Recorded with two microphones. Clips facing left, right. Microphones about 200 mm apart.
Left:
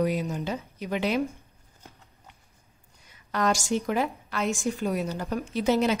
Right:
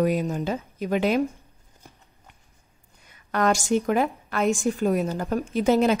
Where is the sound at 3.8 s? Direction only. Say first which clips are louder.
Right 4 dB; 50° right (ahead or behind).